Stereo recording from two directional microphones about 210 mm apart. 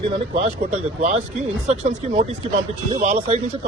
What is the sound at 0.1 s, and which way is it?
A man's voice, 30° right (ahead or behind).